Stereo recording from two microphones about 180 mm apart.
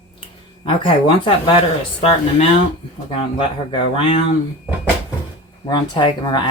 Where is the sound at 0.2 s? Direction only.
25° left (ahead or behind).